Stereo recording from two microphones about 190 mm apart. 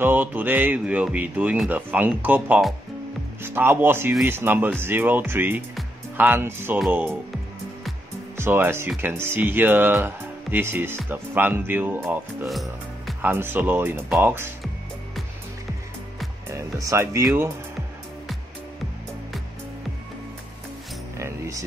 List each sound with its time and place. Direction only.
0.0 s speech: 10° right (ahead or behind)
8.4 s speech: 10° right (ahead or behind)
13.3 s speech: 10° right (ahead or behind)
16.8 s speech: 15° right (ahead or behind)
21.2 s music: 15° right (ahead or behind)